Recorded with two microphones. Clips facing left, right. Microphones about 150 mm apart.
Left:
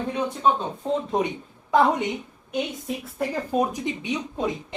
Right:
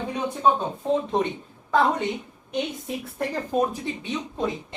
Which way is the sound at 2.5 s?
5° left (ahead or behind).